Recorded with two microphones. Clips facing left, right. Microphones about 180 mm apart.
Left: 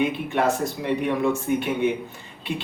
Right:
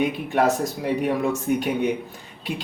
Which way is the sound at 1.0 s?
40° right (ahead or behind).